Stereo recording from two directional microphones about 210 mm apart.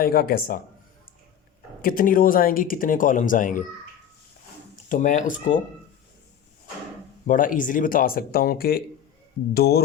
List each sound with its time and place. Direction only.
0.0 s speech: 45° left (ahead or behind)
1.8 s speech: 40° left (ahead or behind)
4.9 s speech: 35° left (ahead or behind)
7.3 s speech: 40° left (ahead or behind)